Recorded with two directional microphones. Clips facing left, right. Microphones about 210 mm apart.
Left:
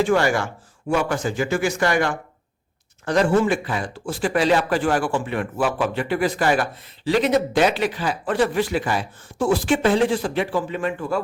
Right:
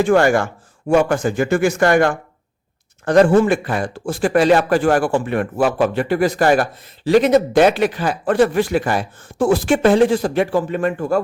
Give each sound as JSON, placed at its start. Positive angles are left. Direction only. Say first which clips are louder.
{"t": 0.0, "sound": "speech", "louder": "right 5 dB", "side_deg": -50}